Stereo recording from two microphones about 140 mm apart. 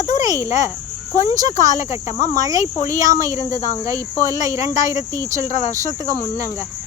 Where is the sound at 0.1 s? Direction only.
25° right (ahead or behind).